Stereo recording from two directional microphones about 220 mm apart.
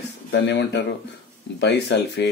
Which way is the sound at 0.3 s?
50° left (ahead or behind).